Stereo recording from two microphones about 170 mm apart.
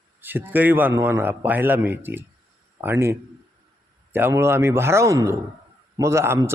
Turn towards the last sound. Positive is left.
turn(degrees=-15)  # may be behind; listen again after turning